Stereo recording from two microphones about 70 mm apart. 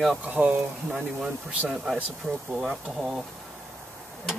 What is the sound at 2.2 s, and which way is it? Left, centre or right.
Speech, centre.